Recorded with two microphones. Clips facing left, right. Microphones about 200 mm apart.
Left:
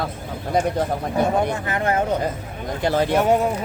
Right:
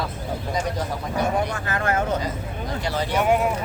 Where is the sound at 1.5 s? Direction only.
20° left (ahead or behind).